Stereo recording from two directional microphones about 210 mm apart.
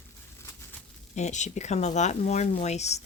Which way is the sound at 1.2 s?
35° left (ahead or behind).